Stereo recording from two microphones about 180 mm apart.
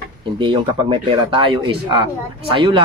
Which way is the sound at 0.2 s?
25° right (ahead or behind).